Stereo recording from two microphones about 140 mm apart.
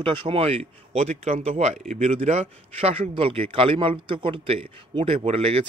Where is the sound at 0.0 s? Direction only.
40° right (ahead or behind).